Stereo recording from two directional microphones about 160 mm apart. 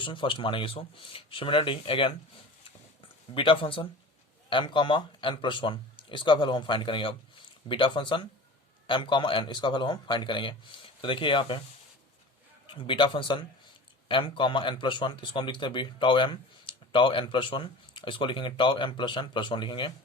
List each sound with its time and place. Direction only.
0.0 s speech: 30° left (ahead or behind)
3.3 s speech: 30° left (ahead or behind)
12.6 s speech: 30° left (ahead or behind)